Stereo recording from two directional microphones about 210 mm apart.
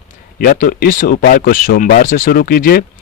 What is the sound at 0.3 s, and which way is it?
A man's voice, 40° left (ahead or behind).